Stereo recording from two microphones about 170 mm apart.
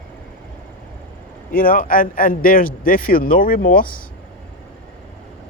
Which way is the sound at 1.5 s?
55° left (ahead or behind).